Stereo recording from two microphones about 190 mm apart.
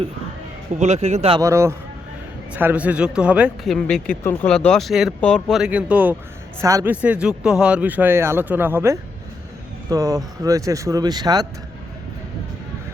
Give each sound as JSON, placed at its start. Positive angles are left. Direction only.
{"t": 0.8, "sound": "a man's voice", "side_deg": -35}
{"t": 1.4, "sound": "speech", "side_deg": -15}